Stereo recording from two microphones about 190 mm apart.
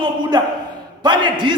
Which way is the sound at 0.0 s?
25° right (ahead or behind).